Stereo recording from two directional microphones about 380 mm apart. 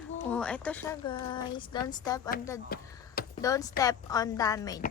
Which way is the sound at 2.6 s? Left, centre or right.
Left.